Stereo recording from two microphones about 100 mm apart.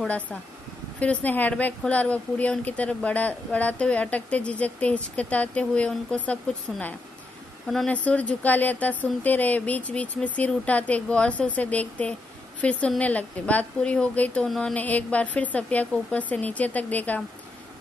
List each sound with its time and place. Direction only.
0.0 s speech: 15° left (ahead or behind)
7.6 s speech: 5° left (ahead or behind)
7.9 s speech: 15° left (ahead or behind)